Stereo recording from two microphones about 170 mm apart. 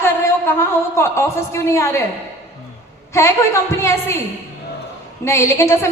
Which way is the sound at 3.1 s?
15° left (ahead or behind).